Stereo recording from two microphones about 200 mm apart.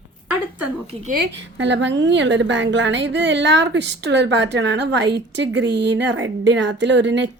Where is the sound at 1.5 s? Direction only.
65° right (ahead or behind).